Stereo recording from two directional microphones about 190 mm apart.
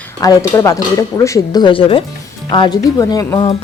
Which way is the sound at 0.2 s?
15° left (ahead or behind).